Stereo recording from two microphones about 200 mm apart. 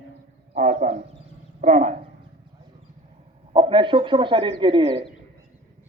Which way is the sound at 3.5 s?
25° right (ahead or behind).